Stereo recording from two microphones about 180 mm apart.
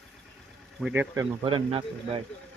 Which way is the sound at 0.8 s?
10° right (ahead or behind).